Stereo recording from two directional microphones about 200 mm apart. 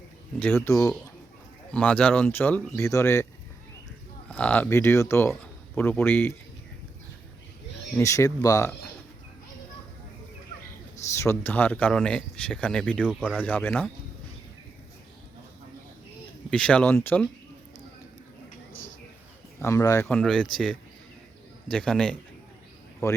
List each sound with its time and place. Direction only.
0.3 s speech: 10° left (ahead or behind)
4.3 s speech: 5° left (ahead or behind)
7.9 s speech: 15° left (ahead or behind)
11.1 s speech: 15° left (ahead or behind)
16.5 s speech: 5° left (ahead or behind)
19.6 s speech: 15° left (ahead or behind)